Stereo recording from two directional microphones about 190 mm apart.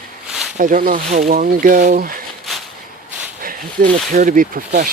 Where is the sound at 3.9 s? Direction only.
45° right (ahead or behind).